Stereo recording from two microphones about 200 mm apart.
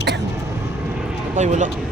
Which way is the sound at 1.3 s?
35° right (ahead or behind).